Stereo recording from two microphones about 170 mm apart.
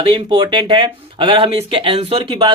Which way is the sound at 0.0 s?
30° right (ahead or behind).